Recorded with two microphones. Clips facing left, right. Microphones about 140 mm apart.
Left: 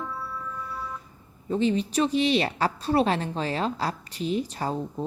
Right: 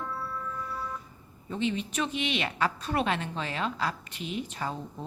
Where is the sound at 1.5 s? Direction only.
35° left (ahead or behind).